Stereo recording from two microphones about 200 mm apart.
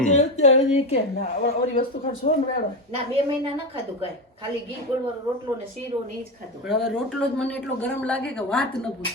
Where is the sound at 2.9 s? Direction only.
30° right (ahead or behind).